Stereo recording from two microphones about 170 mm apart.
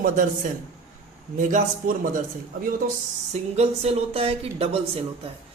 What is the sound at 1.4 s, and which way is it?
Speech, 50° right (ahead or behind).